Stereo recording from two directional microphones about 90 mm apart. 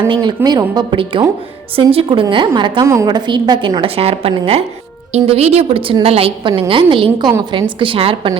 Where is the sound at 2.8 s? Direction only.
30° right (ahead or behind).